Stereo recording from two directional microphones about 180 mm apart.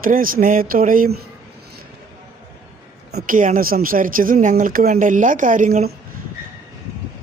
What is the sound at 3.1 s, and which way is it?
A woman's voice, 55° right (ahead or behind).